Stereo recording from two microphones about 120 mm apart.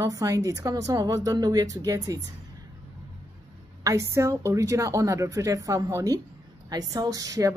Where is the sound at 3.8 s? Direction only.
25° right (ahead or behind).